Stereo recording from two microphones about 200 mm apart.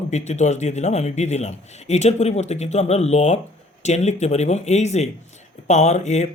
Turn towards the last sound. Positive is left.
turn(degrees=35)  # may be behind; listen again after turning